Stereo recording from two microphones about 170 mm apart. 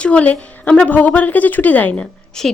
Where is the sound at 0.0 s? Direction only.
5° left (ahead or behind).